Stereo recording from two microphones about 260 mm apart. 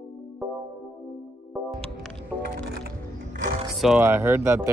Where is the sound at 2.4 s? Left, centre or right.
Right.